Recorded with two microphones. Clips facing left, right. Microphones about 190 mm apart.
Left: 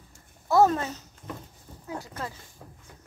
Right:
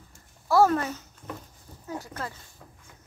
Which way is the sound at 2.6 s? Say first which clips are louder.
Left 4 dB; 25° left (ahead or behind).